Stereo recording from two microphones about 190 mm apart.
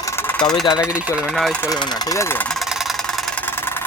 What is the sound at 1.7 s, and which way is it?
Speech, 20° left (ahead or behind).